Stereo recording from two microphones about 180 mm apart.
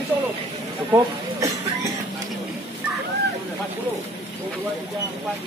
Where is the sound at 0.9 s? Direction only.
15° right (ahead or behind).